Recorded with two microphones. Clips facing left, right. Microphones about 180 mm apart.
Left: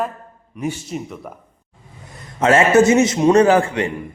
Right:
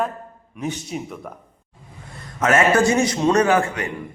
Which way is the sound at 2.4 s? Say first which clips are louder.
Left 4 dB; 30° left (ahead or behind).